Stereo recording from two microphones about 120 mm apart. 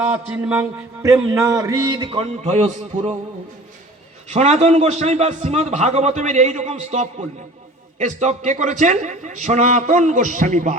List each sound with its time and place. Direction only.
0.0 s a man's voice: 10° right (ahead or behind)
1.0 s speech: 25° right (ahead or behind)
2.1 s a man's voice: 65° right (ahead or behind)
4.3 s a man's voice: 65° right (ahead or behind); by 10.8 s 85° right